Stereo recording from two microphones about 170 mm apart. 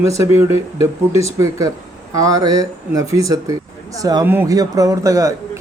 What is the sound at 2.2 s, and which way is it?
Speech, 20° right (ahead or behind).